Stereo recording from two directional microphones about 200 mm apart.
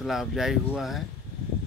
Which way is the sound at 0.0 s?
Centre (ahead or behind).